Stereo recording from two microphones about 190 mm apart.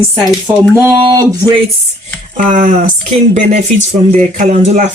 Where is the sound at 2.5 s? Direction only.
45° right (ahead or behind).